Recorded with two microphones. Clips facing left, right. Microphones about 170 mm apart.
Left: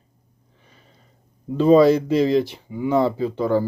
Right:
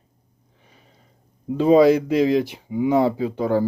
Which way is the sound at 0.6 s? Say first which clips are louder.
Even; 10° right (ahead or behind).